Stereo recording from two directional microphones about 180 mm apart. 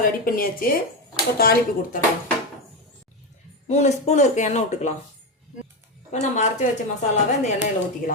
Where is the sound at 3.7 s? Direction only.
40° left (ahead or behind).